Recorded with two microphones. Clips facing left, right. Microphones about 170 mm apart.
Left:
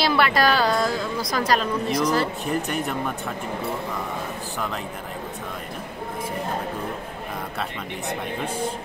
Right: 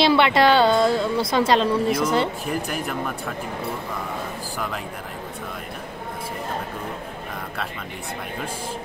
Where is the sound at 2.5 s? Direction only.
5° right (ahead or behind).